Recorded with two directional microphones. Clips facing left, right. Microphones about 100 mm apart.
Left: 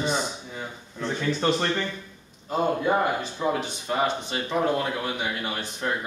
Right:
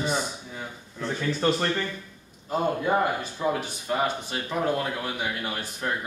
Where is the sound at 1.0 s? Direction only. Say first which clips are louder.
Left 1 dB; 20° left (ahead or behind).